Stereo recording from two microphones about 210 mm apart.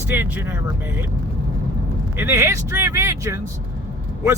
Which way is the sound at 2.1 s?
10° right (ahead or behind).